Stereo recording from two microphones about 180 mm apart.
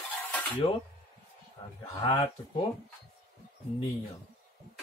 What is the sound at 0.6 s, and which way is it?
Speech, 30° left (ahead or behind).